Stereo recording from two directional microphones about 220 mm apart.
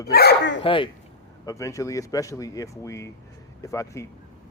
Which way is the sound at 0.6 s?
25° left (ahead or behind).